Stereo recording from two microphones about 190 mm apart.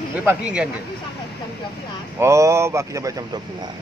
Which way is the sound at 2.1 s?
15° right (ahead or behind).